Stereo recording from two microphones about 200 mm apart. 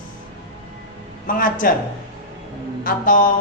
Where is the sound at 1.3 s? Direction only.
45° left (ahead or behind).